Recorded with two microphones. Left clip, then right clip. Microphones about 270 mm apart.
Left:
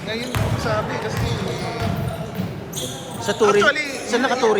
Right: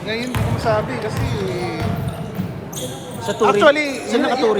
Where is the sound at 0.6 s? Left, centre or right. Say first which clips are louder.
Right 5 dB; right.